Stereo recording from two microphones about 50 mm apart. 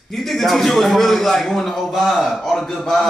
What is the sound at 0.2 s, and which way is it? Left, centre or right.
A man's voice, centre.